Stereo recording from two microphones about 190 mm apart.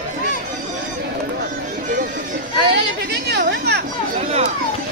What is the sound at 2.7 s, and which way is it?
Chatter, 60° right (ahead or behind).